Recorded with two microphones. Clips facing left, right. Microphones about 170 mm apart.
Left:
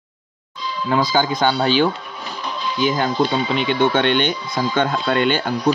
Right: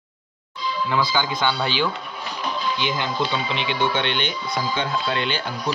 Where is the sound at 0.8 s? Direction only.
45° left (ahead or behind).